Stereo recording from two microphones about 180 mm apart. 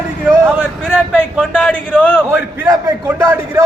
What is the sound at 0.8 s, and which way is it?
A man's voice, 5° left (ahead or behind).